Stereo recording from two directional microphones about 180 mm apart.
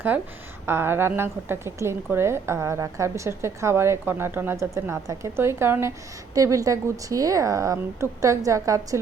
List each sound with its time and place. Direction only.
0.1 s a woman's voice: 10° right (ahead or behind)